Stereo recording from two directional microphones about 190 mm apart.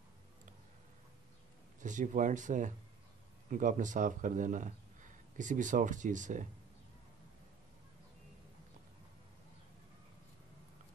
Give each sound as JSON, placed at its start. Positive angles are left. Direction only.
{"t": 1.8, "sound": "speech", "side_deg": -40}